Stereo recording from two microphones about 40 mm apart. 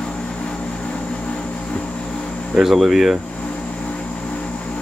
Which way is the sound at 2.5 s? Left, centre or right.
Centre.